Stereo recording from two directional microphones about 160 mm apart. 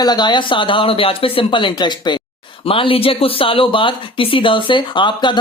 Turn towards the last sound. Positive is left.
turn(degrees=30)  # may be behind; listen again after turning